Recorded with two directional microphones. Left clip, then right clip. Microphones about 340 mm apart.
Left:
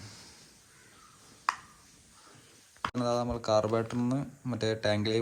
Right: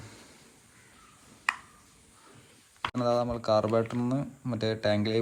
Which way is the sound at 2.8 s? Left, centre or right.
Centre.